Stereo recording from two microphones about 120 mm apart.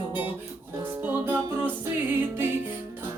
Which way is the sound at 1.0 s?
20° right (ahead or behind).